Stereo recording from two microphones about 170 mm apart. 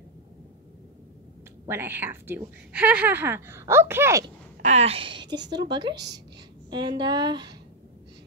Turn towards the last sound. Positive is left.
turn(degrees=-25)  # may be behind; listen again after turning